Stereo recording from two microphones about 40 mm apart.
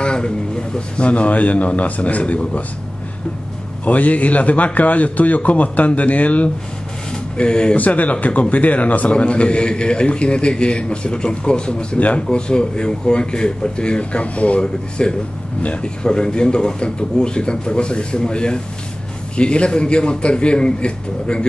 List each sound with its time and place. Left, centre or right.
0.0 s a man's voice: left
3.8 s a man's voice: left
7.1 s a sound: left
7.7 s a man's voice: left
14.6 s speech: left